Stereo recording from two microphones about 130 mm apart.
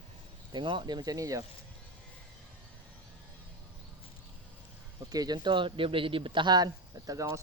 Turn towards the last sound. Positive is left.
turn(degrees=-25)  # may be behind; listen again after turning